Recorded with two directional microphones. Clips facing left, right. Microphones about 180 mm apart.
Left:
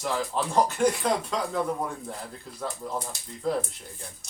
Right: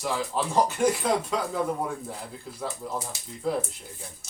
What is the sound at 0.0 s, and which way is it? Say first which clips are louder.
Speech: even; centre (ahead or behind).